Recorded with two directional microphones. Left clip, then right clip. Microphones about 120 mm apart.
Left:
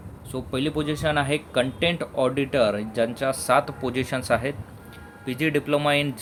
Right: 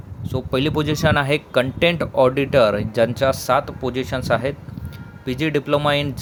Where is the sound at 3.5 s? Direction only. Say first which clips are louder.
Right 2 dB; 25° right (ahead or behind).